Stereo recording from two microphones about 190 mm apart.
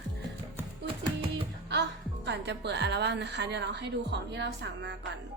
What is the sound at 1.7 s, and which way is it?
A woman's voice, 65° right (ahead or behind).